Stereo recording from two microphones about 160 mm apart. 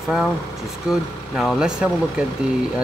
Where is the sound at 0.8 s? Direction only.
Centre (ahead or behind).